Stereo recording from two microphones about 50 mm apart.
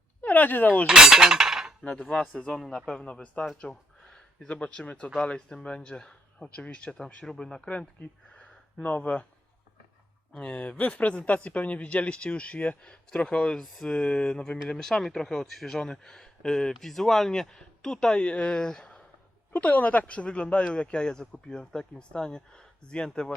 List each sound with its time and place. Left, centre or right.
0.2 s speech: left
0.9 s cutlery: centre
1.8 s speech: left
2.4 s speech: centre
8.0 s speech: left
10.3 s speech: centre
11.5 s speech: left
13.5 s speech: centre
13.8 s speech: centre
14.7 s speech: centre
19.5 s speech: left